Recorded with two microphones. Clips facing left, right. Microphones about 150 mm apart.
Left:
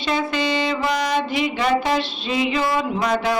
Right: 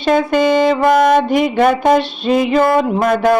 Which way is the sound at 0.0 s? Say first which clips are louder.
Right 9 dB; 50° right (ahead or behind).